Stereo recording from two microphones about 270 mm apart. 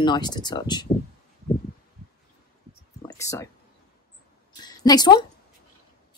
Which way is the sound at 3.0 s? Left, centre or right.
Centre.